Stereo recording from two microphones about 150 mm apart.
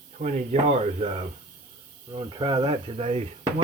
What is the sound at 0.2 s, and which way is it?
Speech, 55° right (ahead or behind).